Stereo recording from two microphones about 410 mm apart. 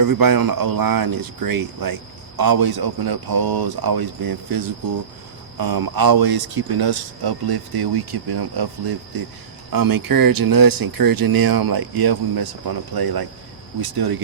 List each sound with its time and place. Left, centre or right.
0.0 s speech: right
9.7 s speech: right